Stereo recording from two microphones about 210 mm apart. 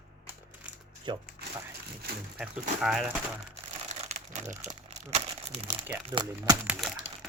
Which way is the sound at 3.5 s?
30° right (ahead or behind).